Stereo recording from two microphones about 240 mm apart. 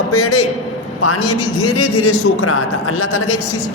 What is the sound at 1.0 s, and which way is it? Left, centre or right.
A man's voice, left.